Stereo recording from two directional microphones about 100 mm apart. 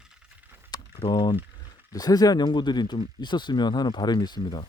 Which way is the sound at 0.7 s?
45° left (ahead or behind).